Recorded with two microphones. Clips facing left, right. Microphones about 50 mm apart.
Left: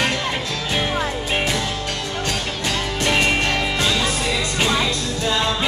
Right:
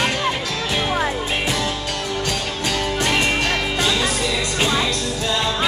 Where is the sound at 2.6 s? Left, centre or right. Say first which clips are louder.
Right 1 dB; centre.